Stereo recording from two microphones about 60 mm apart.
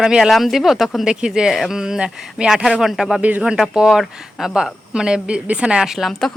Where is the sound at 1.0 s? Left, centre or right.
Centre.